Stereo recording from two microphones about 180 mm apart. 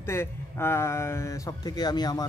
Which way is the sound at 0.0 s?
15° left (ahead or behind).